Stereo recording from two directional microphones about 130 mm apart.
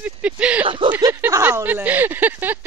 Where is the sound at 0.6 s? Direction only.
40° right (ahead or behind).